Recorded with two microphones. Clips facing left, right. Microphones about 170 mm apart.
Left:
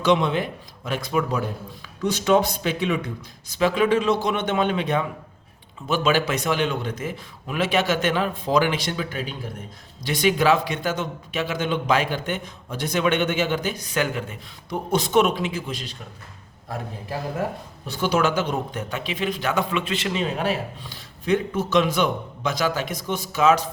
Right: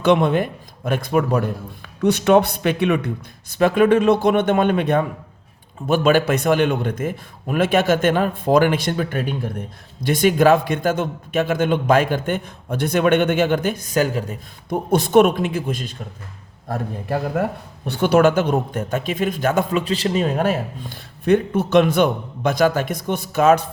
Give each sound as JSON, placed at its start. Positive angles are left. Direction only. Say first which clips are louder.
{"t": 0.0, "sound": "a man's voice", "louder": "right 4 dB", "side_deg": -55}
{"t": 14.7, "sound": "a man's voice", "louder": "right 5 dB", "side_deg": -55}